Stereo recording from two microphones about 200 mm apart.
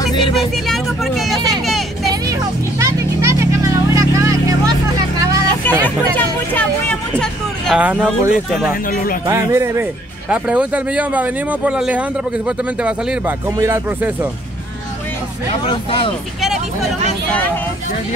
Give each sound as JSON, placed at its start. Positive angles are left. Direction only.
{"t": 0.4, "sound": "vehicle", "side_deg": 0}
{"t": 2.8, "sound": "vehicle", "side_deg": -15}
{"t": 5.7, "sound": "a sound", "side_deg": 10}
{"t": 9.3, "sound": "speech", "side_deg": -15}
{"t": 13.6, "sound": "speech", "side_deg": -15}
{"t": 15.7, "sound": "speech", "side_deg": 25}